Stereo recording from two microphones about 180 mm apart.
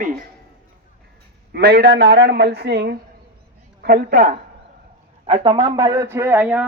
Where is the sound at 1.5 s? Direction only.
60° right (ahead or behind).